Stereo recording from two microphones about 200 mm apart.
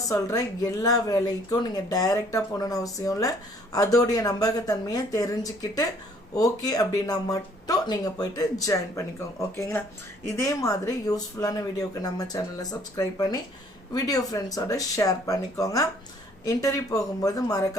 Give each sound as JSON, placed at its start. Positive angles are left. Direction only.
{"t": 0.1, "sound": "speech", "side_deg": 15}